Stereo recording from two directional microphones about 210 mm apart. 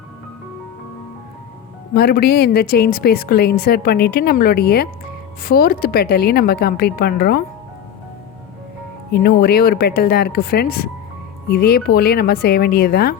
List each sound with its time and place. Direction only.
1.9 s a woman's voice: 45° left (ahead or behind)
9.1 s a woman's voice: 45° left (ahead or behind)